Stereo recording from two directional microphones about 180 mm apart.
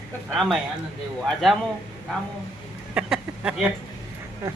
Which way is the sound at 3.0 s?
5° right (ahead or behind).